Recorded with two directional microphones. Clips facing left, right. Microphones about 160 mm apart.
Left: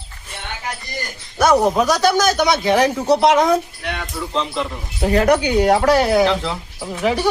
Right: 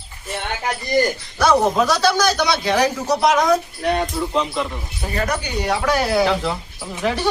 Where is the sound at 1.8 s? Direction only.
15° left (ahead or behind).